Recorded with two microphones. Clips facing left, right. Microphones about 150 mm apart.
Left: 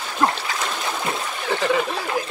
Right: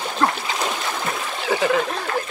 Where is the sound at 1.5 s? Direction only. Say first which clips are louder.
Right 1 dB; centre (ahead or behind).